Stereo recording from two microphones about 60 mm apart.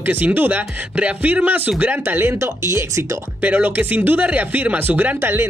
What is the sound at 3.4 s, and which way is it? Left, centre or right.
Speech, right.